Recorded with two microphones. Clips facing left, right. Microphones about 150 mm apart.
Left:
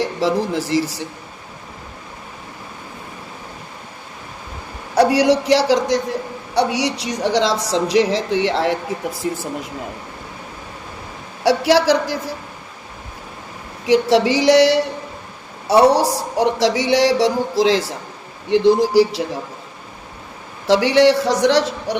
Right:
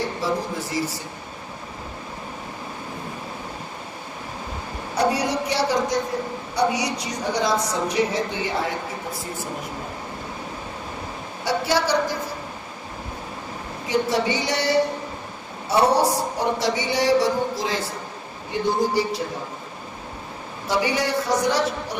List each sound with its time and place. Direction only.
0.2 s speech: 90° left
4.9 s a woman's voice: 90° left
11.4 s speech: 90° left
13.8 s speech: 90° left
20.7 s speech: 90° left